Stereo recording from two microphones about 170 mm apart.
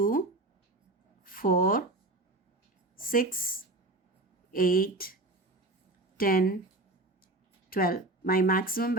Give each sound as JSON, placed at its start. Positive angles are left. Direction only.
{"t": 0.0, "sound": "a sound", "side_deg": 55}
{"t": 1.2, "sound": "speech", "side_deg": 55}
{"t": 2.9, "sound": "a woman's voice", "side_deg": 55}
{"t": 4.5, "sound": "speech", "side_deg": 60}
{"t": 6.1, "sound": "speech", "side_deg": 60}
{"t": 7.7, "sound": "speech", "side_deg": 60}